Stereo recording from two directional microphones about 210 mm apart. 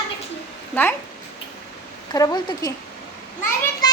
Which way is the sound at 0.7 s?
10° left (ahead or behind).